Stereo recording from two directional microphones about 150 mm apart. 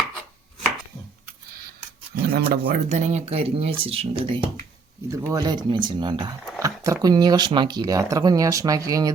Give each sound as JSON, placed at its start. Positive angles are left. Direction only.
{"t": 2.3, "sound": "speech", "side_deg": -90}
{"t": 2.9, "sound": "speech", "side_deg": -50}
{"t": 5.1, "sound": "speech", "side_deg": -20}